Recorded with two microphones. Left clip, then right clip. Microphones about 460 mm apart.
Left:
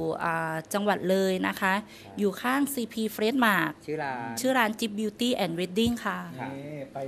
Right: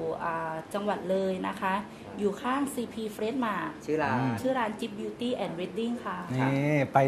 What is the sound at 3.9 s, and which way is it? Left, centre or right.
A woman's voice, left.